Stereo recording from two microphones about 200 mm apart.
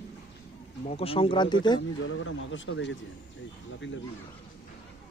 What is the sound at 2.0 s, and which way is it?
Speech, 75° left (ahead or behind).